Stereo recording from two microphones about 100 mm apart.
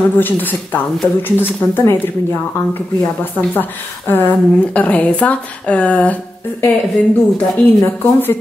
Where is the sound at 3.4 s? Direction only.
20° left (ahead or behind).